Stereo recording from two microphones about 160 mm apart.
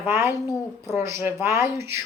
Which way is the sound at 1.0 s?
15° right (ahead or behind).